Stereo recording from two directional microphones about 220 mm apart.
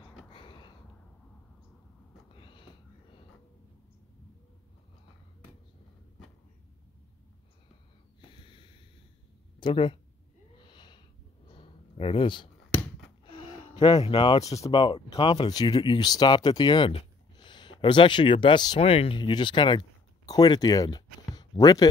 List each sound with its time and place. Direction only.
0.3 s a sound: 20° left (ahead or behind)
2.3 s a sound: 20° left (ahead or behind)
8.2 s snort: 20° left (ahead or behind)
9.6 s speech: 20° left (ahead or behind)
10.6 s sniff: 20° left (ahead or behind)
13.2 s speech: 20° left (ahead or behind)